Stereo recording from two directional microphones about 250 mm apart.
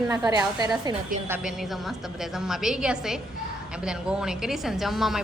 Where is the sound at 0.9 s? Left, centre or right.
Centre.